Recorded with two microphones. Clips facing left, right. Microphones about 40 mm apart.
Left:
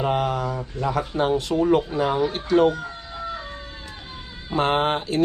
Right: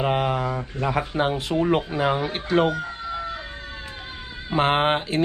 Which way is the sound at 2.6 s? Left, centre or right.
Centre.